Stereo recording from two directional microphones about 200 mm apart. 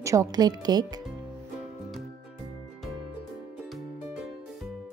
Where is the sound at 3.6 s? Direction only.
Centre (ahead or behind).